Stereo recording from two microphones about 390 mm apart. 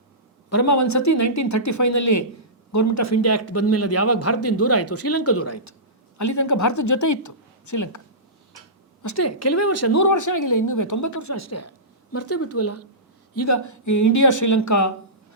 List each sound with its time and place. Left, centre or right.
0.5 s a man's voice: left
9.0 s a man's voice: left